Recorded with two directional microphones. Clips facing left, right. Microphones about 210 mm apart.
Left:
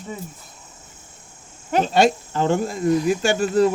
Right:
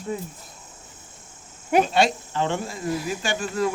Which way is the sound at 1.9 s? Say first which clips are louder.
Left 4 dB; 45° left (ahead or behind).